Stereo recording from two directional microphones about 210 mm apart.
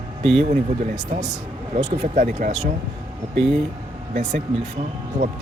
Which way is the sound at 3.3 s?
Centre (ahead or behind).